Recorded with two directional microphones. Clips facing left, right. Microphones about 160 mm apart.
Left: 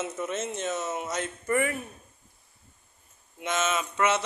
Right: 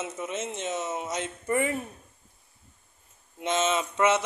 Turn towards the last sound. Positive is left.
turn(degrees=-20)  # may be behind; listen again after turning